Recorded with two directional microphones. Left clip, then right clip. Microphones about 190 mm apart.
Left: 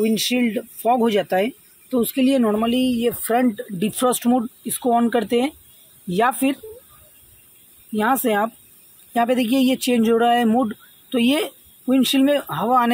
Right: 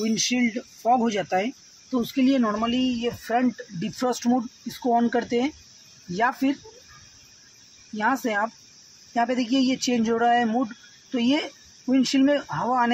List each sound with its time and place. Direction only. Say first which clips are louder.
0.0 s speech: left 4 dB; 25° left (ahead or behind)
4.0 s speech: left 5 dB; 25° left (ahead or behind)
8.0 s speech: left 5 dB; 40° left (ahead or behind)